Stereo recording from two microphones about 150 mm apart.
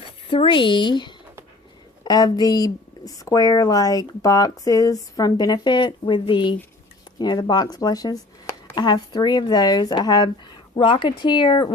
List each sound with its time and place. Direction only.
0.3 s speech: 35° left (ahead or behind)